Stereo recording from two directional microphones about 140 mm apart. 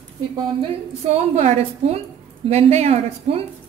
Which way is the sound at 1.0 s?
50° right (ahead or behind).